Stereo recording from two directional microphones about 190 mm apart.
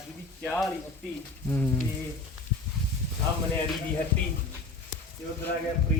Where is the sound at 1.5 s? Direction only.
10° left (ahead or behind).